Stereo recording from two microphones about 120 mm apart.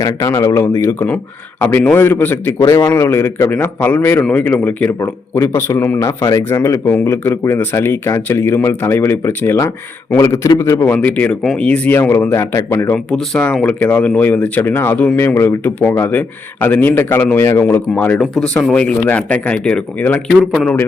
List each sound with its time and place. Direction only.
0.0 s a man's voice: 30° left (ahead or behind)
10.9 s a man's voice: 10° left (ahead or behind)
12.9 s speech: 5° left (ahead or behind)
20.4 s a man's voice: centre (ahead or behind)